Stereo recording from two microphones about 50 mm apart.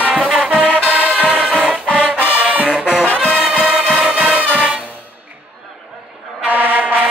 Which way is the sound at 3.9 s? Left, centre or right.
Right.